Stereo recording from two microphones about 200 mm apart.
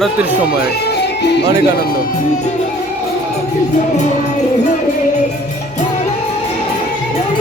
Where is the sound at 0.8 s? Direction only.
60° left (ahead or behind).